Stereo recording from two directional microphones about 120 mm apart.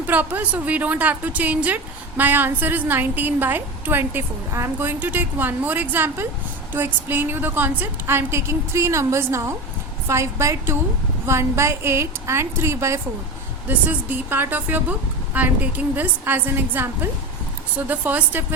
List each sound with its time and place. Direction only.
0.1 s a woman's voice: 15° right (ahead or behind)